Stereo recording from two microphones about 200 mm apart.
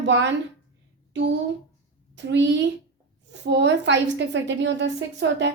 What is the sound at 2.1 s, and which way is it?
A woman's voice, 60° right (ahead or behind).